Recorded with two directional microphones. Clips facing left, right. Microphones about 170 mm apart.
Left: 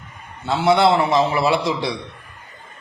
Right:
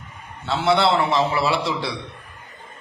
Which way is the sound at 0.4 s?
15° left (ahead or behind).